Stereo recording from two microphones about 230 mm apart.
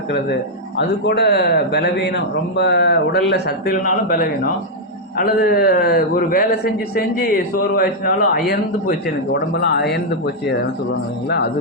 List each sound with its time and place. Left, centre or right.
0.8 s a man's voice: left
11.3 s speech: left